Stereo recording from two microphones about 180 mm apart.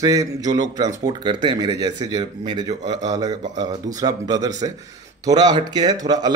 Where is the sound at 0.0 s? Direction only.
20° right (ahead or behind).